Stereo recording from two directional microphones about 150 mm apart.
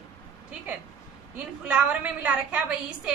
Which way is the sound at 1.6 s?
5° right (ahead or behind).